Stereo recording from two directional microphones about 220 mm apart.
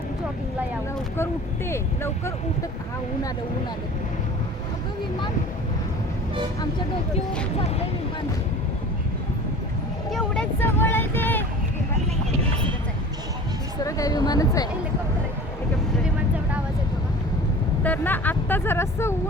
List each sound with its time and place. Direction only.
1.7 s speech: 10° left (ahead or behind)
10.1 s a sound: 5° left (ahead or behind)
13.8 s speech: 15° left (ahead or behind)
17.8 s speech: 10° left (ahead or behind)